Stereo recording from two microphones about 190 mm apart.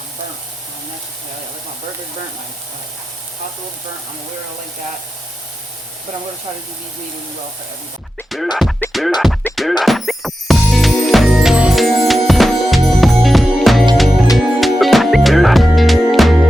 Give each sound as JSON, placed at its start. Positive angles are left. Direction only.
{"t": 8.3, "sound": "music", "side_deg": 0}
{"t": 9.4, "sound": "music", "side_deg": 10}
{"t": 9.8, "sound": "music", "side_deg": 0}